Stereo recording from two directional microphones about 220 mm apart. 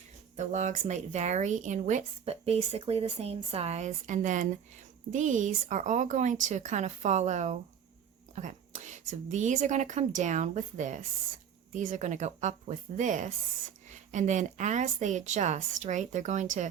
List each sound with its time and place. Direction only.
0.3 s a woman's voice: 35° right (ahead or behind)